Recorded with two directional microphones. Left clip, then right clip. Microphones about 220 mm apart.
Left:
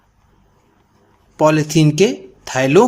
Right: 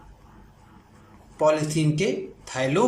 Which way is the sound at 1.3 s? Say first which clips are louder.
Left 7 dB; 40° left (ahead or behind).